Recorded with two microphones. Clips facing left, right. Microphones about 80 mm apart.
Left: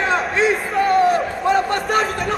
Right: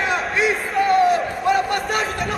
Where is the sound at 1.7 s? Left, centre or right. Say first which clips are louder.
Left 3 dB; left.